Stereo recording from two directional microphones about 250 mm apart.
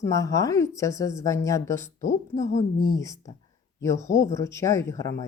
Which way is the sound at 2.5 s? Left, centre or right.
Left.